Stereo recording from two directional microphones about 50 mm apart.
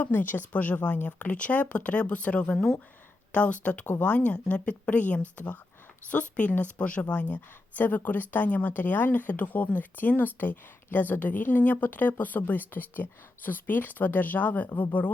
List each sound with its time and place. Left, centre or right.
0.0 s a woman's voice: left